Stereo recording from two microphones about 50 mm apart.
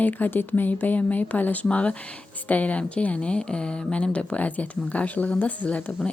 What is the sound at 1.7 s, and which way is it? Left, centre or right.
Speech, left.